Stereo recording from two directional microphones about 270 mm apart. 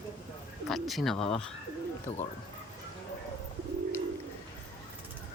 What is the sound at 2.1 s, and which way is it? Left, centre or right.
Speech, left.